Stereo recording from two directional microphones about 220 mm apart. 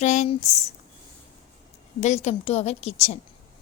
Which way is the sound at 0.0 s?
30° left (ahead or behind).